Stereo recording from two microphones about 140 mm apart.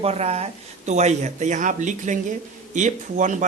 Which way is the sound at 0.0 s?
50° right (ahead or behind).